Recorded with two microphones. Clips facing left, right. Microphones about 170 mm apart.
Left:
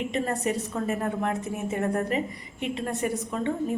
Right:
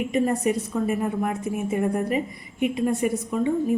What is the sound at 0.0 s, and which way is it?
A woman's voice, 10° right (ahead or behind).